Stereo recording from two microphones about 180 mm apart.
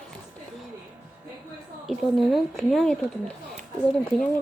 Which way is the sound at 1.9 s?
Centre (ahead or behind).